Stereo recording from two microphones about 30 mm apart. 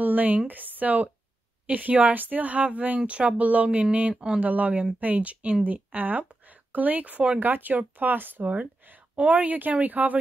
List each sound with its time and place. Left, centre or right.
0.0 s speech: right
3.1 s speech: right
4.1 s speech: right
4.4 s speech: right
5.6 s speech: right
7.4 s speech: right
9.1 s speech: right
9.5 s speech: right